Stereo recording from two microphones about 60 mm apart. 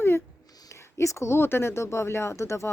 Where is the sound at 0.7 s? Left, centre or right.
Left.